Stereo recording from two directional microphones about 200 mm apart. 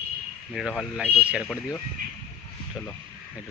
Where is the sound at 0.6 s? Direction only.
5° right (ahead or behind).